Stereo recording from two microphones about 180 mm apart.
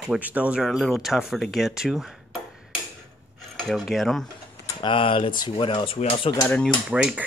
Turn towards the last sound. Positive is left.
turn(degrees=-5)  # may be behind; listen again after turning